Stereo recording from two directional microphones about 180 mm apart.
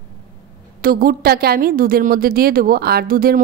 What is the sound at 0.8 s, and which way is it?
A woman's voice, 55° right (ahead or behind).